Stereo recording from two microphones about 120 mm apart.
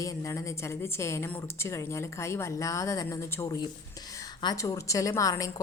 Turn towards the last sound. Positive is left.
turn(degrees=30)  # may be behind; listen again after turning